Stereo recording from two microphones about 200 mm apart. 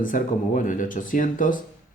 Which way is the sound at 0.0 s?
40° left (ahead or behind).